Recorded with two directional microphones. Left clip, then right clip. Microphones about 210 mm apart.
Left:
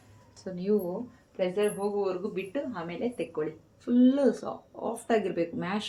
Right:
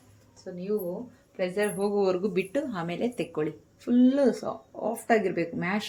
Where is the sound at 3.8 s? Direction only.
25° right (ahead or behind).